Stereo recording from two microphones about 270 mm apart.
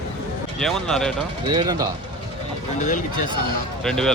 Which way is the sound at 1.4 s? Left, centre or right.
Centre.